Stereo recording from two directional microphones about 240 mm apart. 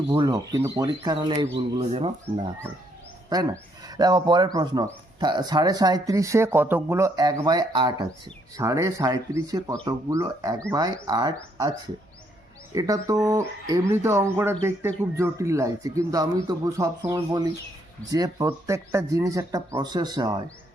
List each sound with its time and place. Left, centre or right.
0.1 s speech: centre
3.2 s speech: centre
12.7 s speech: centre